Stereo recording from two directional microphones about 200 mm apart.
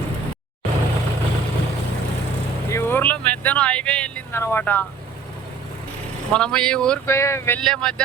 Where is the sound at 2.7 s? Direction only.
10° left (ahead or behind).